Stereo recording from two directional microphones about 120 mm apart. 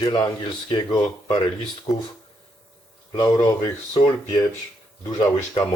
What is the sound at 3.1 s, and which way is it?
Speech, 35° left (ahead or behind).